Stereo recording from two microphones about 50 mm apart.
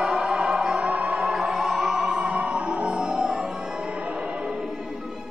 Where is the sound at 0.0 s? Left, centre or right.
Centre.